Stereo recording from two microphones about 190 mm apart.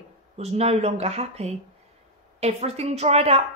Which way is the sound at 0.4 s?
35° right (ahead or behind).